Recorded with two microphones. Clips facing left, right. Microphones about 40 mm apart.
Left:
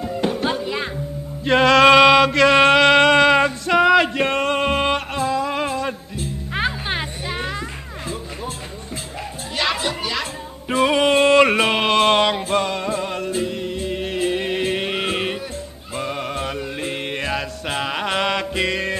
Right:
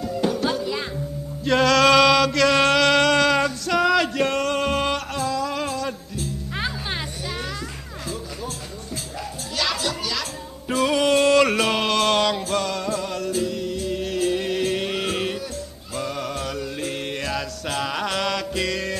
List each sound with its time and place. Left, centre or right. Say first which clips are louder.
0.0 s music: left 1 dB; left
1.4 s chant: left 4 dB; left
9.6 s a sound: left 3 dB; left
15.9 s music: left 2 dB; left